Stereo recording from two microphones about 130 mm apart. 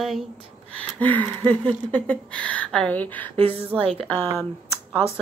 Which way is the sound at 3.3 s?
50° right (ahead or behind).